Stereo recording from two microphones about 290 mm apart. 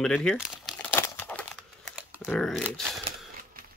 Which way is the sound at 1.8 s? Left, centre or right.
Centre.